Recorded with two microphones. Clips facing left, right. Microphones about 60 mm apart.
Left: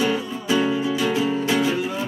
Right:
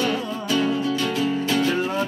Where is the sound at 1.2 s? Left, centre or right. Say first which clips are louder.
Left 1 dB; centre.